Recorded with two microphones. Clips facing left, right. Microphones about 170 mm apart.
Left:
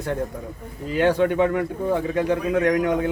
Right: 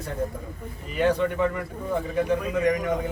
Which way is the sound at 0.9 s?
80° left.